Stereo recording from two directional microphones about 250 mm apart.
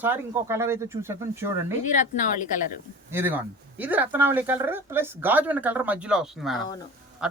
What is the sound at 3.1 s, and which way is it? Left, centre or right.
Speech, centre.